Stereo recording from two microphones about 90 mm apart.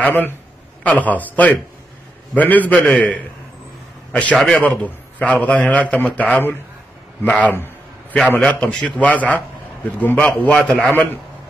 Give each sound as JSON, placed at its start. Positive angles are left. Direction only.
{"t": 0.0, "sound": "a man's voice", "side_deg": 20}
{"t": 7.2, "sound": "a sound", "side_deg": 15}
{"t": 8.4, "sound": "a man's voice", "side_deg": 10}